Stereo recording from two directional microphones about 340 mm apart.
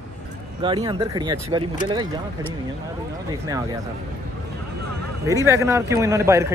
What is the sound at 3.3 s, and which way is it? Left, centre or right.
Speech, centre.